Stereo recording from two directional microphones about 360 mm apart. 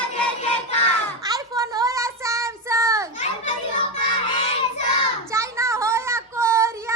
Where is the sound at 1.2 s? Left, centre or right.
Centre.